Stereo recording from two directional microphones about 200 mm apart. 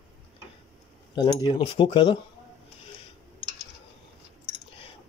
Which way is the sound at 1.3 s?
30° left (ahead or behind).